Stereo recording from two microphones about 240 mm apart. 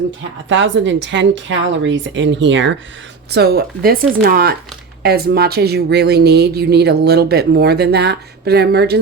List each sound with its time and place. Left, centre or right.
0.4 s speech: right